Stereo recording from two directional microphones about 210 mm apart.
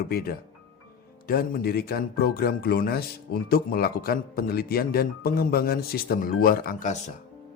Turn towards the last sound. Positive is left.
turn(degrees=35)  # may be behind; listen again after turning